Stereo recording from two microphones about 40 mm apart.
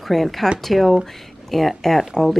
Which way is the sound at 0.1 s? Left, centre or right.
Centre.